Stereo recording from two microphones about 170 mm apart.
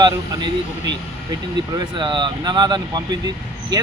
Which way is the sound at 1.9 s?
25° right (ahead or behind).